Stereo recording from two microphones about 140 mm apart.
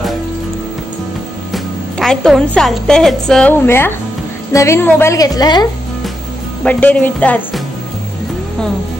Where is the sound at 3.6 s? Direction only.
15° left (ahead or behind).